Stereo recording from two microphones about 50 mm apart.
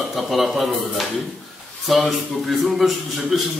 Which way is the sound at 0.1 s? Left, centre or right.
Centre.